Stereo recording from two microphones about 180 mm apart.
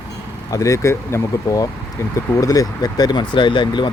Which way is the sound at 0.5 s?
15° left (ahead or behind).